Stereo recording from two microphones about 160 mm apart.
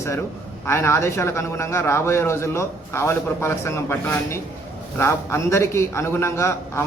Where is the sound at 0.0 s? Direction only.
15° left (ahead or behind).